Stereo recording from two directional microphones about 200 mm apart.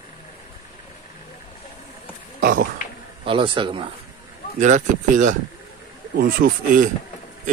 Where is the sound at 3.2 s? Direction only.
25° right (ahead or behind).